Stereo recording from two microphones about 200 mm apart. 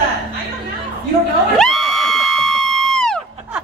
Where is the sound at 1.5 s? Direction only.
Centre (ahead or behind).